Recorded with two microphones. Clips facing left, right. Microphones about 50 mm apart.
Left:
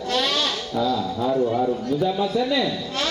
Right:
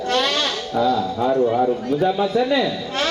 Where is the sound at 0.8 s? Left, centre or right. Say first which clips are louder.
Right 4 dB; right.